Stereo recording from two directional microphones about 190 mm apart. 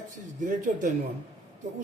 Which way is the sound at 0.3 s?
45° right (ahead or behind).